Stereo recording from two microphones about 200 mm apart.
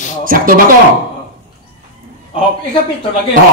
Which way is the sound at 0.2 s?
45° right (ahead or behind).